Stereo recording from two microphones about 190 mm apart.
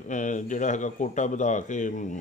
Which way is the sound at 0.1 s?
40° left (ahead or behind).